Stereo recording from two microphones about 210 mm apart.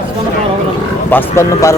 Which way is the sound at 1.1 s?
10° left (ahead or behind).